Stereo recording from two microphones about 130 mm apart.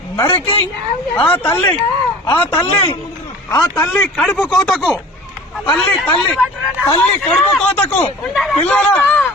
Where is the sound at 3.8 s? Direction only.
10° left (ahead or behind).